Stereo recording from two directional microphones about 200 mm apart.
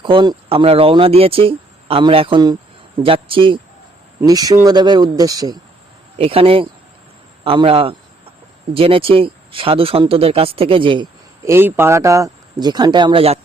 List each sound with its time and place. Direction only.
0.0 s speech: 25° right (ahead or behind)
11.5 s speech: 10° right (ahead or behind); by 13.4 s 30° right (ahead or behind)